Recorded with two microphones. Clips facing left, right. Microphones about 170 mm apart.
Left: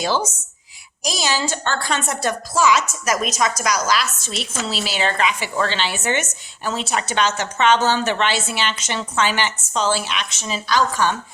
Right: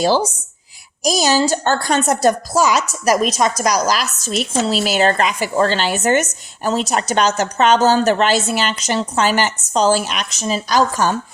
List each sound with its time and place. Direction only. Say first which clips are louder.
0.0 s a woman's voice: right 6 dB; 35° right (ahead or behind)